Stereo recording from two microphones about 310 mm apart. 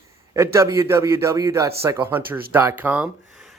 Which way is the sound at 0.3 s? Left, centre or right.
Centre.